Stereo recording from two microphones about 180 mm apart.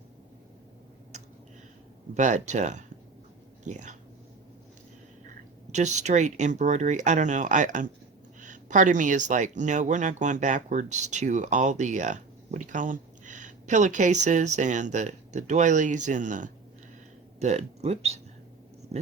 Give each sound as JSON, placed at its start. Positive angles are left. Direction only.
{"t": 1.1, "sound": "tick", "side_deg": -40}
{"t": 2.1, "sound": "speech", "side_deg": -40}
{"t": 5.7, "sound": "speech", "side_deg": -40}